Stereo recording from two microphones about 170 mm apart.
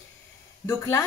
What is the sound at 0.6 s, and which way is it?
Speech, 15° left (ahead or behind).